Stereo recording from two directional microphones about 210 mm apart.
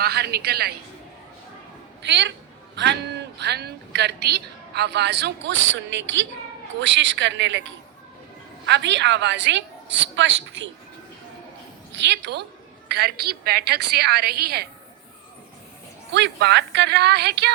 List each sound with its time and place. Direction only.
0.0 s a woman's voice: 50° right (ahead or behind)
2.0 s a woman's voice: 55° right (ahead or behind)
8.6 s a woman's voice: 55° right (ahead or behind)
11.9 s a woman's voice: 55° right (ahead or behind)
16.1 s a woman's voice: 55° right (ahead or behind)